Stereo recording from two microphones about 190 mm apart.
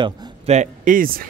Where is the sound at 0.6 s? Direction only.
45° right (ahead or behind).